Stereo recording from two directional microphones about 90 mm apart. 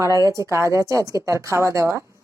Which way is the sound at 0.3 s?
35° right (ahead or behind).